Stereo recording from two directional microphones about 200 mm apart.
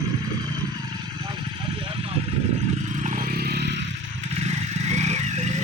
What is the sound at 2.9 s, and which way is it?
Vehicle, 35° right (ahead or behind).